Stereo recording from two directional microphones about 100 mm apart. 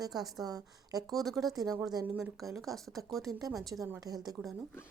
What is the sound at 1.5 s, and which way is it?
Speech, 35° right (ahead or behind).